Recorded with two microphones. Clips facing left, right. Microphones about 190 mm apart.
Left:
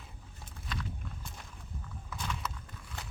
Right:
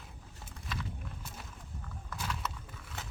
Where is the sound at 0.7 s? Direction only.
5° right (ahead or behind).